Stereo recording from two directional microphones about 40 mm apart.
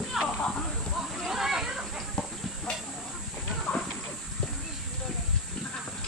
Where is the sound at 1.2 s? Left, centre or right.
Centre.